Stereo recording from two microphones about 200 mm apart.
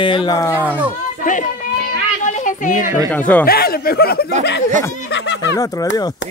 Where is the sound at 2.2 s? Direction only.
40° left (ahead or behind).